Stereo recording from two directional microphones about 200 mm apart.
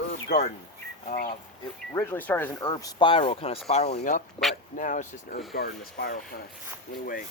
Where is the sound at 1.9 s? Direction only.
10° left (ahead or behind); by 7.2 s 45° left (ahead or behind).